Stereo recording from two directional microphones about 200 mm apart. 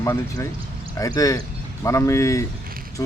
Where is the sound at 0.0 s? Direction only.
15° left (ahead or behind).